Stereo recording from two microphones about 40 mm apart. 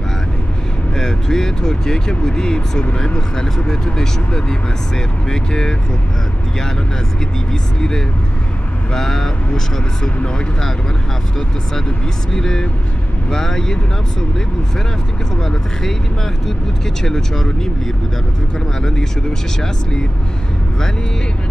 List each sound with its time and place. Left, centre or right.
0.9 s speech: centre
8.9 s speech: centre
12.3 s speech: centre
15.4 s speech: centre
17.0 s speech: centre
18.8 s speech: centre